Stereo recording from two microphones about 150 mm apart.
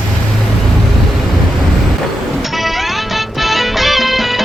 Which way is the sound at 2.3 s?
Centre (ahead or behind).